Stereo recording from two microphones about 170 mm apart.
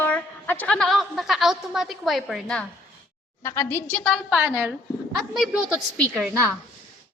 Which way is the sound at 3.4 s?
15° left (ahead or behind).